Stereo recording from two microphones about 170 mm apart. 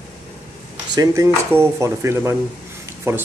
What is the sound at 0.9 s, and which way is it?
Speech, 15° right (ahead or behind).